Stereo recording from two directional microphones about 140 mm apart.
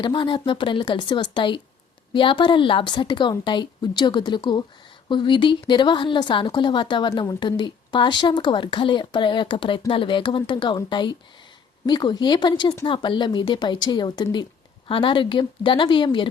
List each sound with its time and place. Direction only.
0.0 s a woman's voice: 35° left (ahead or behind)